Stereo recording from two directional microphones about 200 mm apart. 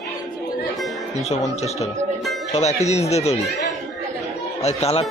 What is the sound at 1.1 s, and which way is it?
Speech, 35° left (ahead or behind).